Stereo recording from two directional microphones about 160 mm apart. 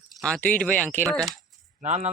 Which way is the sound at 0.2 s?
5° left (ahead or behind).